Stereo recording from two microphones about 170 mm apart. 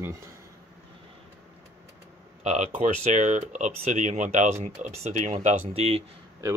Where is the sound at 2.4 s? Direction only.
40° right (ahead or behind).